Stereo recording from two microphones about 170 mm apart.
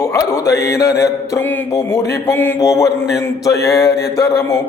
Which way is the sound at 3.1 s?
20° left (ahead or behind).